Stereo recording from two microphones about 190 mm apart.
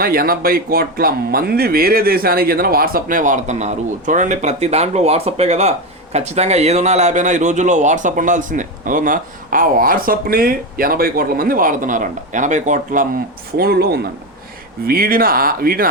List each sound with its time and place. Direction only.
0.0 s a man's voice: 50° right (ahead or behind)
13.6 s a man's voice: 55° right (ahead or behind)